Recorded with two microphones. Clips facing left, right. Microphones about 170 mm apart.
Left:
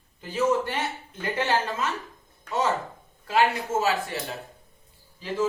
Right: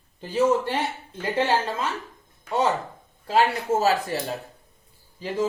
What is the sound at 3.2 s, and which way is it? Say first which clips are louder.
Speech: right 2 dB; 35° right (ahead or behind).